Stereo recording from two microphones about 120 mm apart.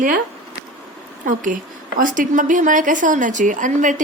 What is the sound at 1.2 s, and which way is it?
A woman's voice, 90° right.